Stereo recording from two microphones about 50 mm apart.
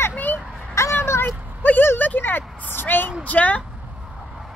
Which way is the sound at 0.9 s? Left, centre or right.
Left.